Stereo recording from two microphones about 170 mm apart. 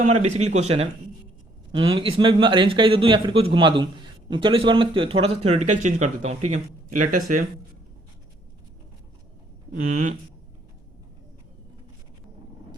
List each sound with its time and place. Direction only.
0.0 s a man's voice: 40° right (ahead or behind)
9.9 s speech: 50° right (ahead or behind)